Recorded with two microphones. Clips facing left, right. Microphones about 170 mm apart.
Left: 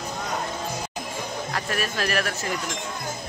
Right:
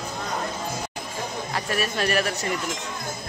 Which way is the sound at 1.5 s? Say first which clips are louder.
Right 2 dB; centre (ahead or behind).